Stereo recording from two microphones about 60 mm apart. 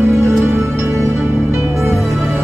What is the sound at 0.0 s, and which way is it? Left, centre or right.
Music, right.